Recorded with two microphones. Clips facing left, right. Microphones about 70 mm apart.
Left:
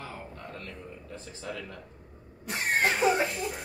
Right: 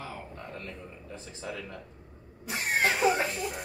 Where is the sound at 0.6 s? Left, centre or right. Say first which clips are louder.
Even; right.